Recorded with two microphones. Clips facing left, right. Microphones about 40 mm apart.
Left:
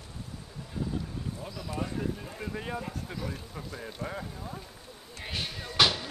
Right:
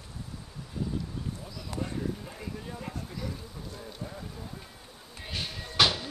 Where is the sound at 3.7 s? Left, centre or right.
Left.